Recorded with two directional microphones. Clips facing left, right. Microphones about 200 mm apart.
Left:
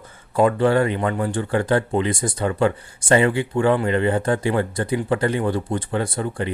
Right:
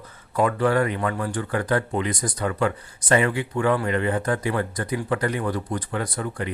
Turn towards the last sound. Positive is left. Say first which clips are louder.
# left 4 dB
turn(degrees=30)  # may be behind; listen again after turning